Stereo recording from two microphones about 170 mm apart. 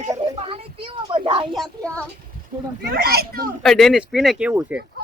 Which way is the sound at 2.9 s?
65° right (ahead or behind).